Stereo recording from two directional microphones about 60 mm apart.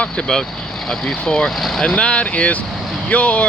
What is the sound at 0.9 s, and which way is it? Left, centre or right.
Speech, centre.